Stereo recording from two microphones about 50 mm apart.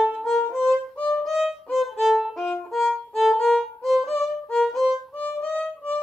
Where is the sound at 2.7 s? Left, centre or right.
Centre.